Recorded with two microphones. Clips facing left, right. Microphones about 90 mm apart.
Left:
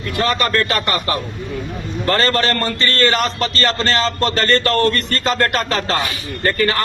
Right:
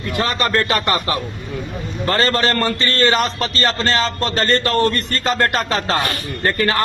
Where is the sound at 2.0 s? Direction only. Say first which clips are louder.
Even; 20° right (ahead or behind).